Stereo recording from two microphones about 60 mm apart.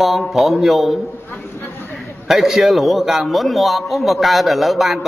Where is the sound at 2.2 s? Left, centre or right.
Centre.